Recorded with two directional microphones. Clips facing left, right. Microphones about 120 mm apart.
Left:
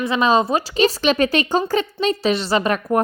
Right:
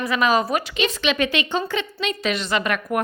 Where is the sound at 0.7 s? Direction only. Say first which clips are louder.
Left 7 dB; 40° left (ahead or behind).